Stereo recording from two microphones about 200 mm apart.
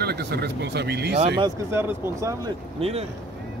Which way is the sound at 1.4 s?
10° right (ahead or behind).